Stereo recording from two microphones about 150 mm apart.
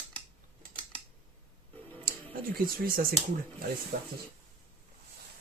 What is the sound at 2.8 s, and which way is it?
Speech, 75° right (ahead or behind).